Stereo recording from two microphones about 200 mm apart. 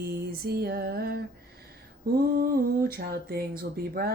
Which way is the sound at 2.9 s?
50° right (ahead or behind).